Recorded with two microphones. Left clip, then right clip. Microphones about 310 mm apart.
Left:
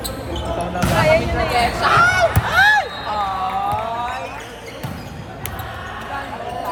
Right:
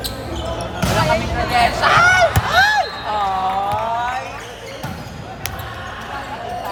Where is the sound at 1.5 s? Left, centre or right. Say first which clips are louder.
Right 2 dB; right.